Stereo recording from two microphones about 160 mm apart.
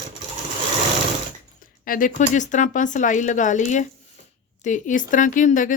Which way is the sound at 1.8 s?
60° left (ahead or behind).